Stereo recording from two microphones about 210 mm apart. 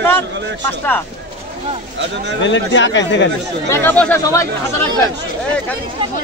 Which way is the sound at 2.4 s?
60° left (ahead or behind).